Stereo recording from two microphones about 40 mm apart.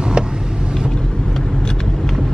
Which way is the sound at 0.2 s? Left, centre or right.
Right.